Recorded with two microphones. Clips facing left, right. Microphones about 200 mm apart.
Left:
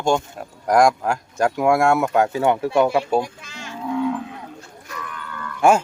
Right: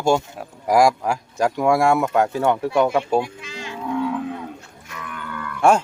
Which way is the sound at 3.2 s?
45° left (ahead or behind).